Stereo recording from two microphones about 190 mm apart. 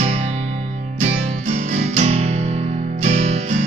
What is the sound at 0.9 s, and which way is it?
Music, 40° right (ahead or behind).